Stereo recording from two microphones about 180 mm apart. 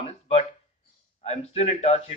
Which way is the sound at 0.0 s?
35° left (ahead or behind).